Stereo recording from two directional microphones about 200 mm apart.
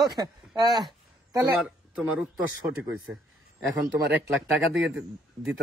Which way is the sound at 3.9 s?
60° right (ahead or behind).